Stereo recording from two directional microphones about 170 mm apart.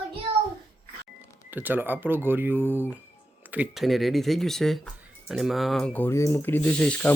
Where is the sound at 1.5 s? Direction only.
10° right (ahead or behind).